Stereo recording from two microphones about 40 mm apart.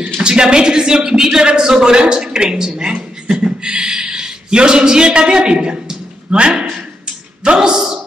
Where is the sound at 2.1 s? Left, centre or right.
Centre.